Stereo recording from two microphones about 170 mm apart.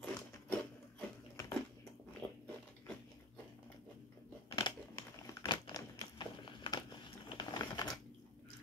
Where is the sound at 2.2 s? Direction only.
5° left (ahead or behind).